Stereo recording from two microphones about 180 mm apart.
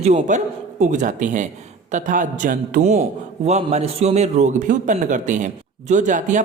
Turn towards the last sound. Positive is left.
turn(degrees=-45)  # may be behind; listen again after turning